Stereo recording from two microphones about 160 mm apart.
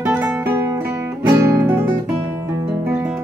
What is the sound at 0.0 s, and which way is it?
Music, 10° right (ahead or behind).